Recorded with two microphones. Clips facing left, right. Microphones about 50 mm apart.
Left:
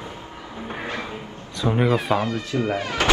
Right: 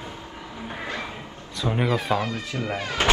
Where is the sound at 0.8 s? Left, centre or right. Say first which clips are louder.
Left 2 dB; left.